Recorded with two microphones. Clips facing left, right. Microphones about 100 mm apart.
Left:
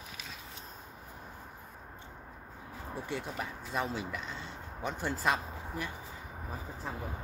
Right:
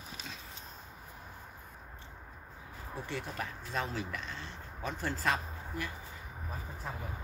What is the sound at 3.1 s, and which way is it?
Speech, 10° left (ahead or behind).